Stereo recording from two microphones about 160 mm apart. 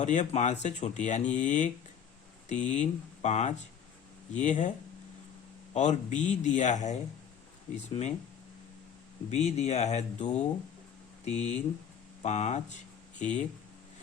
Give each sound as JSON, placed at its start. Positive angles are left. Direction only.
{"t": 0.0, "sound": "speech", "side_deg": 50}
{"t": 5.7, "sound": "speech", "side_deg": 50}
{"t": 9.3, "sound": "speech", "side_deg": 40}